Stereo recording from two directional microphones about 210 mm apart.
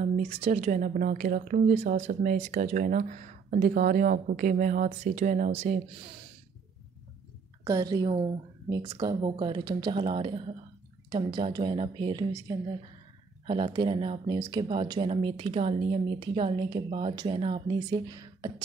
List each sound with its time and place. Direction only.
0.0 s speech: 35° right (ahead or behind)
7.6 s speech: 15° right (ahead or behind)
17.8 s speech: 20° right (ahead or behind)